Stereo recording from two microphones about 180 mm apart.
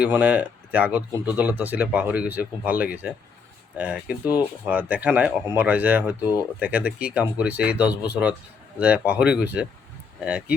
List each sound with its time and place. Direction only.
0.0 s speech: 5° right (ahead or behind)